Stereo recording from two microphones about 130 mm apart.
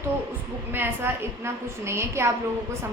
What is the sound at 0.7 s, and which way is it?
A woman's voice, 15° right (ahead or behind).